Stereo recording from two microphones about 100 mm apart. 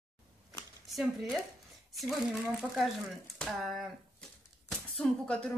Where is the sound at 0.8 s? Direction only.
Centre (ahead or behind).